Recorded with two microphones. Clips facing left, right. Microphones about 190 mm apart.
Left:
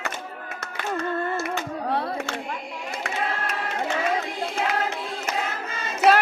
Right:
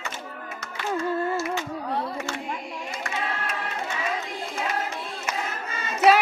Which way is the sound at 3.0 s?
80° left.